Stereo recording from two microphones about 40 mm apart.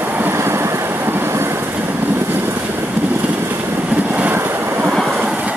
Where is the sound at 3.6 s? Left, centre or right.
Right.